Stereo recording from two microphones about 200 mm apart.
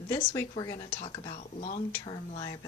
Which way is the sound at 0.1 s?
20° left (ahead or behind).